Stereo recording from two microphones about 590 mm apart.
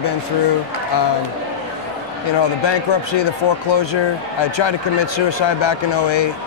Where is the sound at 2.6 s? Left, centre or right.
Left.